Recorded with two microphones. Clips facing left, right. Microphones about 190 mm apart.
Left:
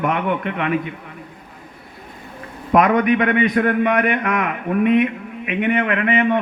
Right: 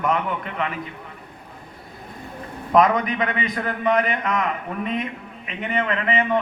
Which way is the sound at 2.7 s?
60° left (ahead or behind).